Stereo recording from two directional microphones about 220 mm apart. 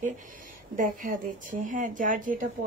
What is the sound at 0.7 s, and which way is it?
Speech, 40° right (ahead or behind).